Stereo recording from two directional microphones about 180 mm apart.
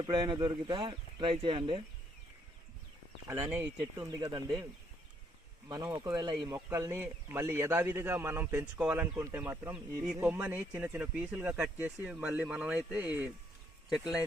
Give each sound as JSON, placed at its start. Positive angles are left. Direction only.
{"t": 0.0, "sound": "speech", "side_deg": -25}
{"t": 3.2, "sound": "speech", "side_deg": -15}
{"t": 5.6, "sound": "speech", "side_deg": -20}